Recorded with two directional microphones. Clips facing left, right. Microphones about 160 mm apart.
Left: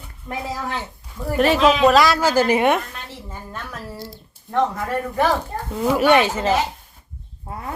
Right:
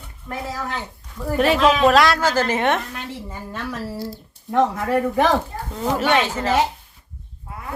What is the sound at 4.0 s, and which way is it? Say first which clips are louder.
Speech: right 5 dB; 10° right (ahead or behind).